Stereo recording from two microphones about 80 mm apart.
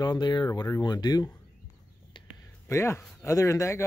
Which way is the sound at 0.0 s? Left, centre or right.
Left.